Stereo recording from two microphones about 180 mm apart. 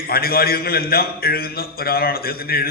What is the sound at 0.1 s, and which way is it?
A man's voice, 55° left (ahead or behind).